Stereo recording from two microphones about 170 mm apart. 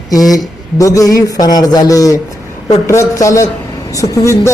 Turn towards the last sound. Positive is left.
turn(degrees=20)  # may be behind; listen again after turning